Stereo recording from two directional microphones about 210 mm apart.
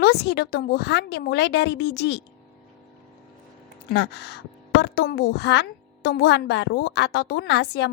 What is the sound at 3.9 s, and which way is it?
A woman's voice, 55° left (ahead or behind).